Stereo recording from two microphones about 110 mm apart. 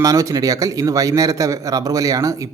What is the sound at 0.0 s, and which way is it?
A man's voice, 30° right (ahead or behind).